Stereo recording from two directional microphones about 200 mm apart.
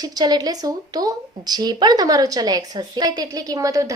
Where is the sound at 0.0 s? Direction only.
20° right (ahead or behind).